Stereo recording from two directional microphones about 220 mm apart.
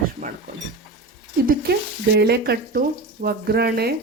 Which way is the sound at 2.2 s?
45° right (ahead or behind).